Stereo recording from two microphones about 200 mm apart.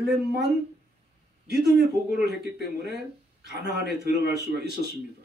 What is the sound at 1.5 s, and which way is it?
Speech, 55° right (ahead or behind).